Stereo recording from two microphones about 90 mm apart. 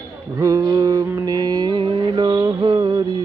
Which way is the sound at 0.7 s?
45° right (ahead or behind).